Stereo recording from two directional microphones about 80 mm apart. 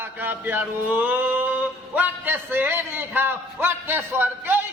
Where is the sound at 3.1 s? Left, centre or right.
Right.